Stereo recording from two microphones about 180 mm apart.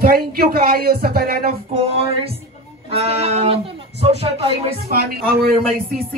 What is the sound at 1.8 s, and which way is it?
Speech, 35° right (ahead or behind).